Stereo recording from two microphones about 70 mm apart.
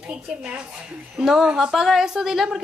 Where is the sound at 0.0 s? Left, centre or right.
Centre.